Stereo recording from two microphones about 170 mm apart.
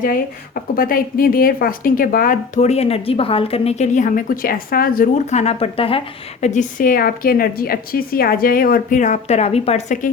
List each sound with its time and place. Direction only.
0.8 s a woman's voice: 60° left (ahead or behind); by 6.0 s 35° left (ahead or behind)
6.4 s a woman's voice: 45° left (ahead or behind)